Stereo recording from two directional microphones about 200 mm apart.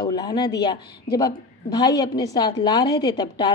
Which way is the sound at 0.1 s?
20° left (ahead or behind).